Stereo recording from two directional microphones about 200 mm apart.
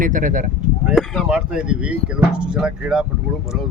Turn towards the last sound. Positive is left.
turn(degrees=-5)  # may be behind; listen again after turning